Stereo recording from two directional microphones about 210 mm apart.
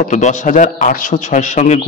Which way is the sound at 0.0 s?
35° left (ahead or behind).